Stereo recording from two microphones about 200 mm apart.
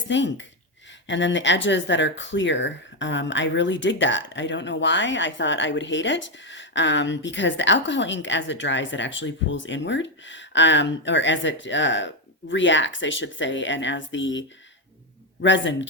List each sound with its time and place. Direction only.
0.1 s a man's voice: 65° left (ahead or behind)